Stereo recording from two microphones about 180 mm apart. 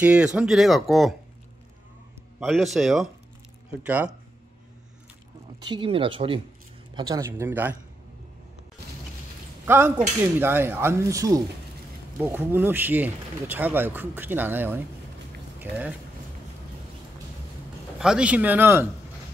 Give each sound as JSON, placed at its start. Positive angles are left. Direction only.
{"t": 0.0, "sound": "speech", "side_deg": -5}
{"t": 2.4, "sound": "speech", "side_deg": 0}
{"t": 5.7, "sound": "speech", "side_deg": -30}
{"t": 7.0, "sound": "speech", "side_deg": -20}
{"t": 9.7, "sound": "speech", "side_deg": -15}
{"t": 17.9, "sound": "speech", "side_deg": -5}